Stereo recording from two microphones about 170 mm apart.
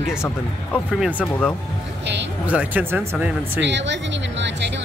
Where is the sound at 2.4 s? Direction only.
10° right (ahead or behind).